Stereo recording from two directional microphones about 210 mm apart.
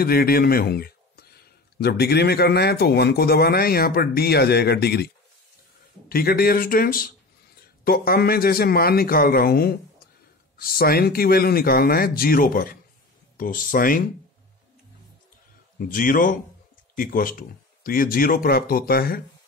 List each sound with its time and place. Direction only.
0.0 s speech: 45° left (ahead or behind)
6.0 s speech: 45° left (ahead or behind)
15.8 s speech: 40° left (ahead or behind)